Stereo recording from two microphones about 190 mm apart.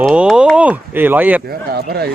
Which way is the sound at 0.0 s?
Centre (ahead or behind).